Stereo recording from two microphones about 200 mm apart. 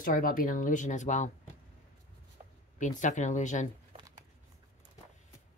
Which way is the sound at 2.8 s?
40° left (ahead or behind).